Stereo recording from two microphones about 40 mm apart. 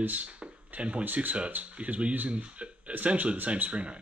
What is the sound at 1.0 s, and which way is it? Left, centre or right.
Speech, right.